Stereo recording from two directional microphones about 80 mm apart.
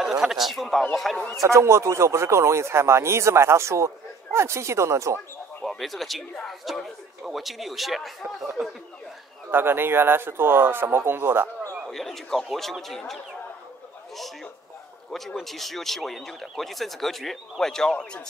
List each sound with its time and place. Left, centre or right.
0.0 s speech: centre
1.4 s speech: right
5.6 s speech: centre
9.5 s speech: right
11.9 s speech: centre